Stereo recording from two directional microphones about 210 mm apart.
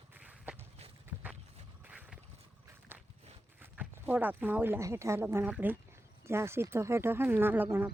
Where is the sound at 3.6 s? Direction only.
10° right (ahead or behind).